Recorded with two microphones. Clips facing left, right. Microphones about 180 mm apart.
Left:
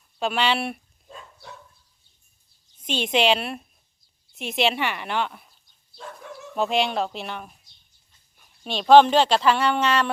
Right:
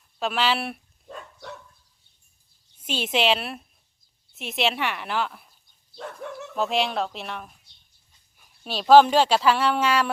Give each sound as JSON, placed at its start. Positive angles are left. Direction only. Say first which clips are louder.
{"t": 0.2, "sound": "speech", "louder": "left 1 dB", "side_deg": 0}
{"t": 1.0, "sound": "dog", "louder": "right 4 dB", "side_deg": -60}
{"t": 2.7, "sound": "speech", "louder": "left 2 dB", "side_deg": -5}
{"t": 6.0, "sound": "dog", "louder": "right 4 dB", "side_deg": -60}
{"t": 6.6, "sound": "speech", "louder": "left 2 dB", "side_deg": 0}